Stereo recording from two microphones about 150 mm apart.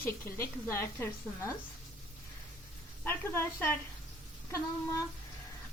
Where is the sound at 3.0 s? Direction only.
15° left (ahead or behind).